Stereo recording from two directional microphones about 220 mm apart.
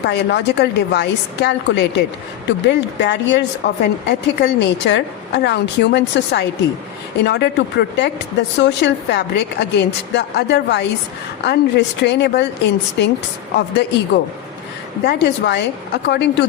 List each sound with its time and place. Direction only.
0.0 s a woman's voice: 50° left (ahead or behind)